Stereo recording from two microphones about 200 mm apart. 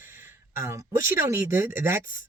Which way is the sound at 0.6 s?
15° right (ahead or behind).